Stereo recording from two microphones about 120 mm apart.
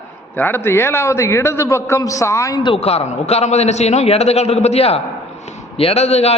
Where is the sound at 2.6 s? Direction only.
55° left (ahead or behind).